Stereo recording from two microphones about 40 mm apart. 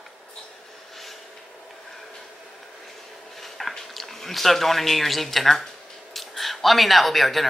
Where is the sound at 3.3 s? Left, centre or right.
Centre.